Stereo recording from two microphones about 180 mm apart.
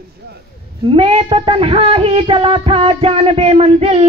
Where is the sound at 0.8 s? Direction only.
30° right (ahead or behind).